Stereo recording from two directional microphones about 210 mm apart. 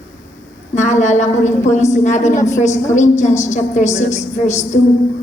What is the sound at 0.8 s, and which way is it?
A woman's voice, 35° left (ahead or behind).